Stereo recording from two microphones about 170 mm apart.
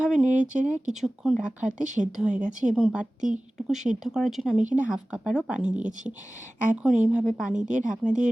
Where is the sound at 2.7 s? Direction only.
5° right (ahead or behind).